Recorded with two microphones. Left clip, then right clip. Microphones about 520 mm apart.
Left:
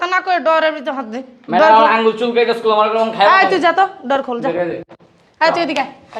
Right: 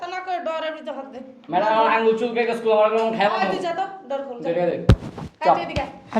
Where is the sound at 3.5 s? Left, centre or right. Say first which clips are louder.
Left 12 dB; left.